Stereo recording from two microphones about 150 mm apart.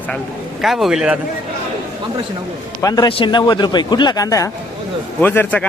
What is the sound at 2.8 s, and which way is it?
Speech, 25° left (ahead or behind).